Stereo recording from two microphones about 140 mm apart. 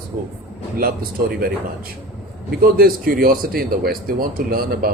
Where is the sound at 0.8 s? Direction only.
90° right.